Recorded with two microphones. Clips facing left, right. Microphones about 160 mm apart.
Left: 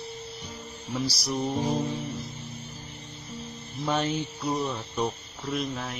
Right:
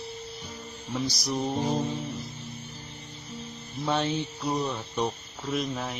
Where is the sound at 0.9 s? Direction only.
Centre (ahead or behind).